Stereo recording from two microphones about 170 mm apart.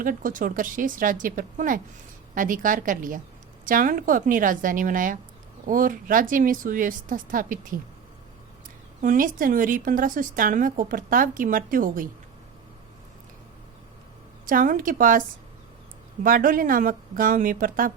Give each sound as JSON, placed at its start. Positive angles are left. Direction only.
{"t": 0.0, "sound": "a woman's voice", "side_deg": -55}
{"t": 9.0, "sound": "a woman's voice", "side_deg": -50}
{"t": 14.4, "sound": "a woman's voice", "side_deg": -55}
{"t": 16.2, "sound": "a woman's voice", "side_deg": -55}